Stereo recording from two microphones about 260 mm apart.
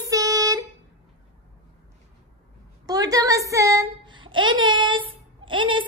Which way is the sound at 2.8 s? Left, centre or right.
Centre.